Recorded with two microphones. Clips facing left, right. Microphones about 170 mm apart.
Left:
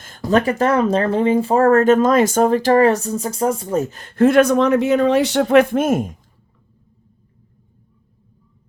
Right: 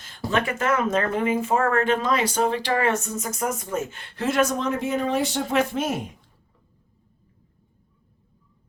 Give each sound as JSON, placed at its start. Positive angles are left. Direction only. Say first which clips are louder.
{"t": 0.3, "sound": "speech", "louder": "left 7 dB", "side_deg": 40}